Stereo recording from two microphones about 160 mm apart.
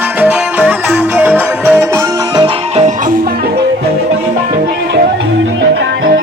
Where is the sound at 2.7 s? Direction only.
45° right (ahead or behind).